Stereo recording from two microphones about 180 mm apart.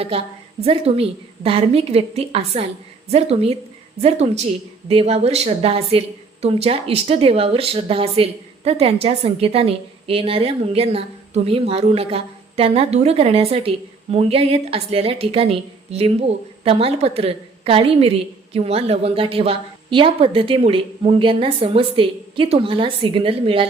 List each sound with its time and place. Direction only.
0.0 s a woman's voice: 30° right (ahead or behind)